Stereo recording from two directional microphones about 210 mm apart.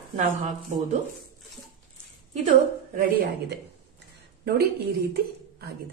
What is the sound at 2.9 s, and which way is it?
Speech, 50° right (ahead or behind).